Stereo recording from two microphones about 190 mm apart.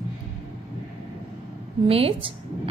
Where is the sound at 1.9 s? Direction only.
30° right (ahead or behind).